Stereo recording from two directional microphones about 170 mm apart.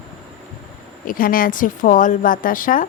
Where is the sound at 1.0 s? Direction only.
55° left (ahead or behind).